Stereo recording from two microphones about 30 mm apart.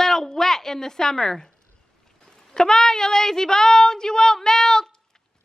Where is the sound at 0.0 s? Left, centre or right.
Centre.